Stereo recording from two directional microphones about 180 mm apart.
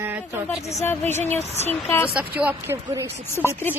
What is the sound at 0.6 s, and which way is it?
Speech, 35° left (ahead or behind).